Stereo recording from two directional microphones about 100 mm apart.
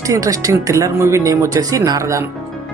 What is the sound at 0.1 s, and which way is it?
Speech, 35° right (ahead or behind).